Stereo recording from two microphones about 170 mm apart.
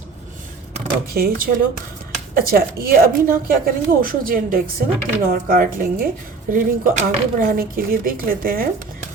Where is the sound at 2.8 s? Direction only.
60° right (ahead or behind).